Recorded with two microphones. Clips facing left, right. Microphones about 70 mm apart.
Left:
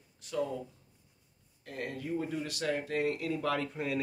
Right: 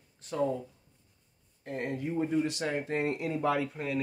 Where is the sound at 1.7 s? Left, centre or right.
Right.